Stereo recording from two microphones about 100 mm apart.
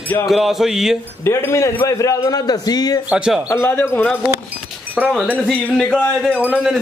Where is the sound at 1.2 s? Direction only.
30° left (ahead or behind).